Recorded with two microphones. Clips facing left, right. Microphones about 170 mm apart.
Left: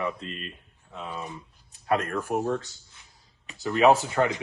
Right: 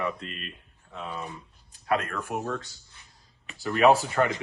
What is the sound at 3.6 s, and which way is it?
Speech, 15° left (ahead or behind).